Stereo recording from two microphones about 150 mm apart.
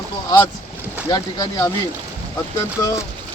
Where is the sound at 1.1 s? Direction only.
25° left (ahead or behind).